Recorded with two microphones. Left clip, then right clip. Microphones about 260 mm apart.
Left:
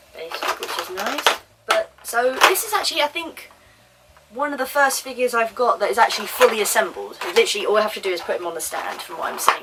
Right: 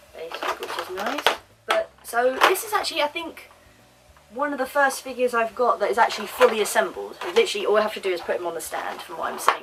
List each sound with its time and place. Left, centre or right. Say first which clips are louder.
0.2 s a sound: left 3 dB; centre
4.4 s speech: left 3 dB; centre
5.5 s speech: left 2 dB; centre
5.8 s speech: left 3 dB; centre